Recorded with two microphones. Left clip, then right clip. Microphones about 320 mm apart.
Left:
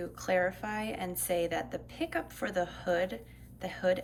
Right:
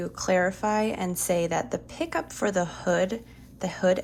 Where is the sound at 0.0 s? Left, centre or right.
Centre.